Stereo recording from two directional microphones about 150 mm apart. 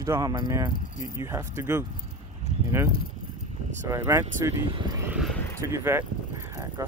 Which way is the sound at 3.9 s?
20° right (ahead or behind).